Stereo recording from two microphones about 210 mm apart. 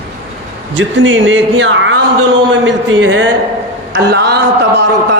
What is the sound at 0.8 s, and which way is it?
A man's voice, 60° right (ahead or behind).